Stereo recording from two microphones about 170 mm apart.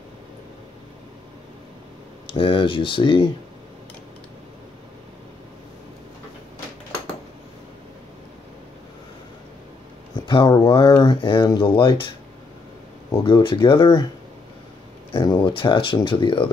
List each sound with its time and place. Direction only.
2.2 s speech: 30° left (ahead or behind)
10.2 s speech: 25° left (ahead or behind)
13.1 s speech: 30° left (ahead or behind)
15.1 s speech: 25° left (ahead or behind)